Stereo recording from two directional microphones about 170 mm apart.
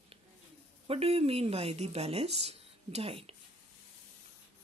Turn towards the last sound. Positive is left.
turn(degrees=-35)  # may be behind; listen again after turning